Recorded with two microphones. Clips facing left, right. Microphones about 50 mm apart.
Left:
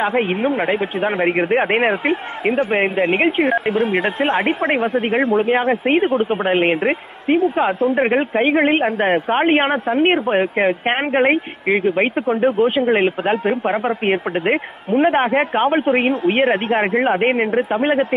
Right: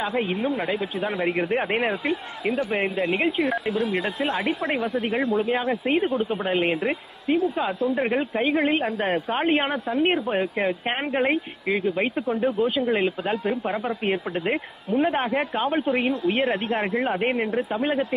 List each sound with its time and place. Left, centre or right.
0.0 s speech: left